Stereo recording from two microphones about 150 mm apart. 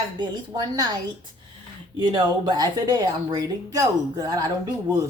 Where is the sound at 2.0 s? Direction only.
30° right (ahead or behind).